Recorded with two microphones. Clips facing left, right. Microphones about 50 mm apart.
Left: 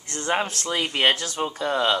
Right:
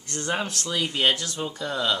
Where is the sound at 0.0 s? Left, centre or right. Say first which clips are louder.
Left 3 dB; left.